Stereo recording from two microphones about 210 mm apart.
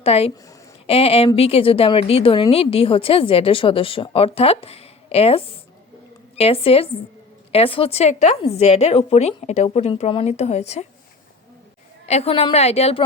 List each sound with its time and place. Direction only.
0.0 s a woman's voice: 30° left (ahead or behind)
12.0 s a woman's voice: 30° left (ahead or behind)